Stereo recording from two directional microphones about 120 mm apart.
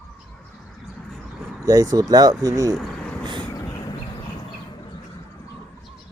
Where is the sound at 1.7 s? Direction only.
30° right (ahead or behind).